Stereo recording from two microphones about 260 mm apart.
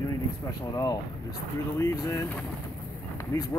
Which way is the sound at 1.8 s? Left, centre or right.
Centre.